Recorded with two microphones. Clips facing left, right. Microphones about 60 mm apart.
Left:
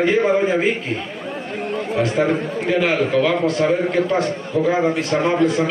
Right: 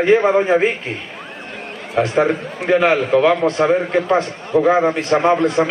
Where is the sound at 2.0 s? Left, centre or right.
Right.